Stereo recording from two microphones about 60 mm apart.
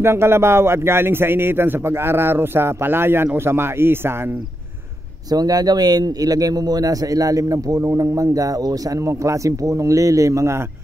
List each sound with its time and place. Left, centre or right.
0.0 s a man's voice: right
5.3 s a man's voice: right